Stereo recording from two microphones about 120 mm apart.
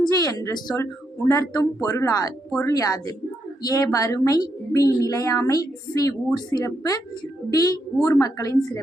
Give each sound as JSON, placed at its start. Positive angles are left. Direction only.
{"t": 0.0, "sound": "a woman's voice", "side_deg": 30}
{"t": 8.0, "sound": "a woman's voice", "side_deg": 30}